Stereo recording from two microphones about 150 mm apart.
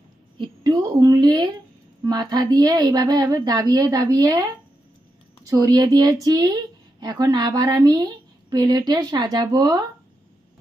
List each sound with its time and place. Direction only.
0.4 s speech: 30° right (ahead or behind)